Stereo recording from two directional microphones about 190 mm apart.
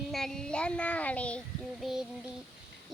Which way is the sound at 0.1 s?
Centre (ahead or behind).